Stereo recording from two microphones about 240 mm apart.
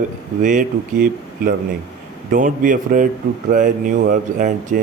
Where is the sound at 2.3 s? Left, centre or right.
Right.